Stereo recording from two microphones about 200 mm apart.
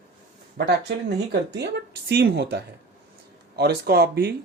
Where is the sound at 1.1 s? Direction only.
60° right (ahead or behind).